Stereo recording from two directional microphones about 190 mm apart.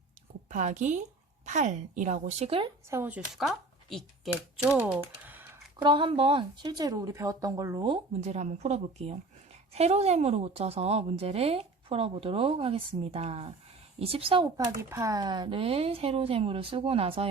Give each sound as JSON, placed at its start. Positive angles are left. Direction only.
{"t": 0.5, "sound": "a woman's voice", "side_deg": -40}
{"t": 2.9, "sound": "speech", "side_deg": -10}
{"t": 4.8, "sound": "typing", "side_deg": -10}
{"t": 5.8, "sound": "a woman's voice", "side_deg": -25}